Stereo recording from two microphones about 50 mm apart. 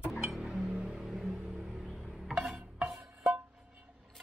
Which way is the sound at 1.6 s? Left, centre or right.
Centre.